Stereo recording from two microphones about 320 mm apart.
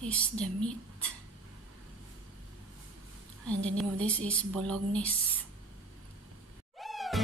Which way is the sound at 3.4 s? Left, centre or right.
Centre.